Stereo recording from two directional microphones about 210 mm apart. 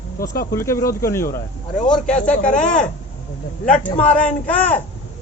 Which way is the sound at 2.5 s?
35° left (ahead or behind).